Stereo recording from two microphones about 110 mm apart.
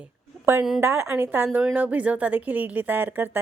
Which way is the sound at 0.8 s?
20° right (ahead or behind).